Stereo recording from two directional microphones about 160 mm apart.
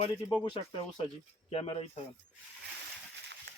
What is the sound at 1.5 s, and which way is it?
Speech, 40° left (ahead or behind).